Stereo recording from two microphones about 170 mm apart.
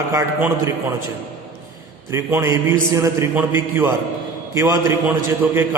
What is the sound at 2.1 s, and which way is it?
A man's voice, 15° right (ahead or behind).